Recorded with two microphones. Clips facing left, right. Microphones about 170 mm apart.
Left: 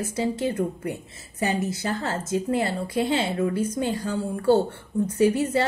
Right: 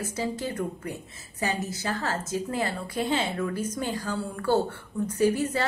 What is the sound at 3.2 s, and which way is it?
A woman's voice, 25° left (ahead or behind).